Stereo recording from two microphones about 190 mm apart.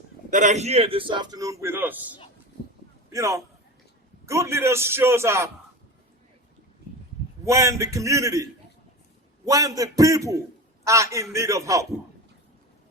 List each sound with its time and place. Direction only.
0.3 s a man's voice: 40° right (ahead or behind); by 5.5 s 15° right (ahead or behind)
7.4 s a man's voice: 15° right (ahead or behind)
9.5 s a man's voice: 20° right (ahead or behind)